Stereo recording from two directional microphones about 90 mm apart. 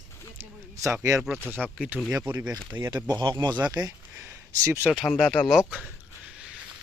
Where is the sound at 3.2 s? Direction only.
50° right (ahead or behind).